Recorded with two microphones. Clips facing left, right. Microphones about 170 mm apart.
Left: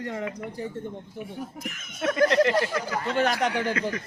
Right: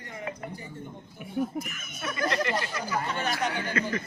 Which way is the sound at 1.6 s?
90° left.